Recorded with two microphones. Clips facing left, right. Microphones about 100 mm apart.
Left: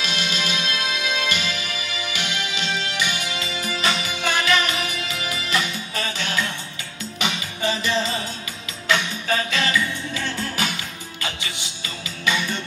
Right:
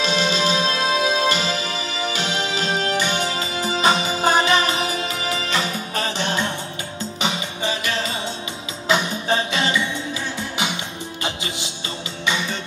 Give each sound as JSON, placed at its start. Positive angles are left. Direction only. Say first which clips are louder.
{"t": 0.0, "sound": "music", "louder": "right 7 dB", "side_deg": -30}
{"t": 6.1, "sound": "music", "louder": "right 3 dB", "side_deg": -25}
{"t": 9.0, "sound": "music", "louder": "right 3 dB", "side_deg": -30}